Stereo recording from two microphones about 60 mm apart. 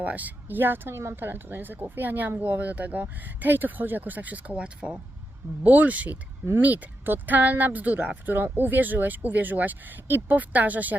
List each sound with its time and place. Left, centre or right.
0.0 s speech: right